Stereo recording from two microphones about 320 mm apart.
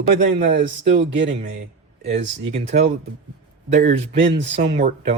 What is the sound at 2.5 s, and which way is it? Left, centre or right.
A man's voice, right.